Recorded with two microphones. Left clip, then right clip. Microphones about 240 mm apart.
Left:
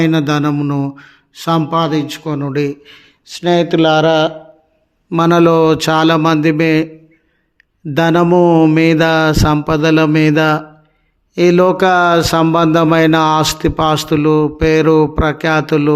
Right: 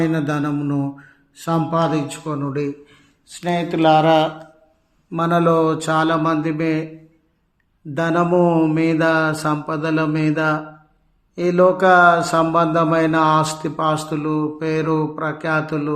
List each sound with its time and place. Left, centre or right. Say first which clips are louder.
0.0 s speech: left 7 dB; left
5.0 s mantra: left 7 dB; left
7.9 s speech: left 6 dB; left